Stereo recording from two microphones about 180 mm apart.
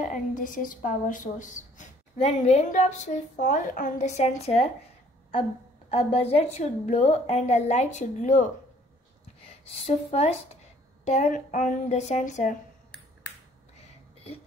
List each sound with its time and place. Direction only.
0.0 s a woman's voice: 45° left (ahead or behind)
5.9 s a woman's voice: 35° left (ahead or behind)
9.7 s a woman's voice: 35° left (ahead or behind)
13.7 s a sound: 35° left (ahead or behind)